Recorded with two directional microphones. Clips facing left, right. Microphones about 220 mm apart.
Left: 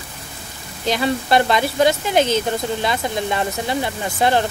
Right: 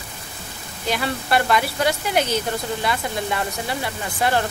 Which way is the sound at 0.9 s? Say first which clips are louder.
Left 4 dB; 20° left (ahead or behind).